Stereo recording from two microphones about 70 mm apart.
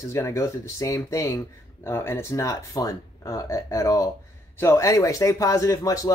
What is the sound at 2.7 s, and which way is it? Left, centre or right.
Speech, left.